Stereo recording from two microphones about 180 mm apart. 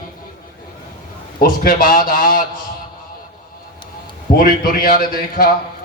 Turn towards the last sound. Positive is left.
turn(degrees=55)  # may be behind; listen again after turning